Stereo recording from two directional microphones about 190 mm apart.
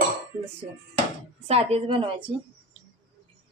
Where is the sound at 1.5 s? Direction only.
30° right (ahead or behind).